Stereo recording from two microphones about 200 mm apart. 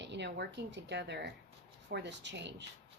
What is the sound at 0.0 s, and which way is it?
Speech, 60° right (ahead or behind).